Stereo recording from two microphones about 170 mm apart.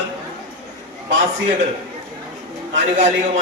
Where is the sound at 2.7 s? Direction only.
45° right (ahead or behind).